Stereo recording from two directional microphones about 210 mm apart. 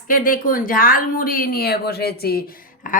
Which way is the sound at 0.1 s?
40° left (ahead or behind).